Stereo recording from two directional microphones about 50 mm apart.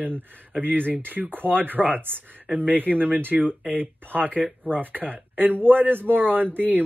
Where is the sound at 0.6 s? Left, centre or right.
Right.